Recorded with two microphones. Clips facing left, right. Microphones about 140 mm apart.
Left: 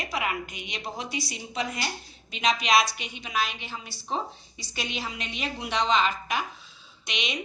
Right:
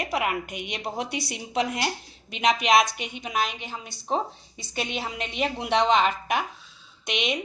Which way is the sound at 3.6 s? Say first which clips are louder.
Right 2 dB; 20° right (ahead or behind).